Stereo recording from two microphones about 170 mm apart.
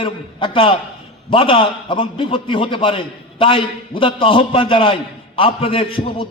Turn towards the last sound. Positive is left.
turn(degrees=30)  # may be behind; listen again after turning